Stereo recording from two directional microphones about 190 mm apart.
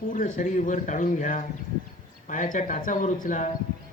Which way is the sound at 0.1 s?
40° left (ahead or behind).